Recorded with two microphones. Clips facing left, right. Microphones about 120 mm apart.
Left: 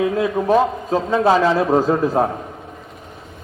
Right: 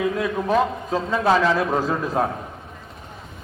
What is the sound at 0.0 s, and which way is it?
A man's voice, 25° left (ahead or behind).